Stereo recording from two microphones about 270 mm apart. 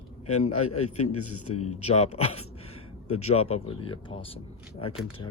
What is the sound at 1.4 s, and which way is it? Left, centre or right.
Speech, left.